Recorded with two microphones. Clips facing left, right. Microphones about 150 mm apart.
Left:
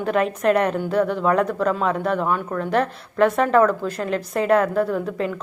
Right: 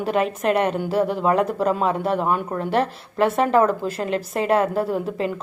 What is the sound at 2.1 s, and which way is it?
A woman's voice, 30° right (ahead or behind).